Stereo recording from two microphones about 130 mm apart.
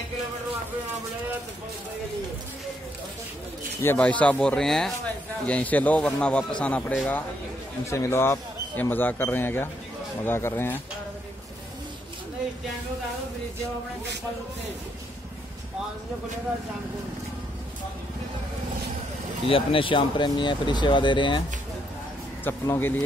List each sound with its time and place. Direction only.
3.8 s a man's voice: 15° left (ahead or behind)
7.8 s a man's voice: 20° left (ahead or behind)
19.5 s speech: 40° left (ahead or behind)
22.4 s a man's voice: 15° left (ahead or behind)